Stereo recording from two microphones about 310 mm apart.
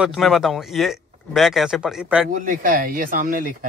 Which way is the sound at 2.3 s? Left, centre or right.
Right.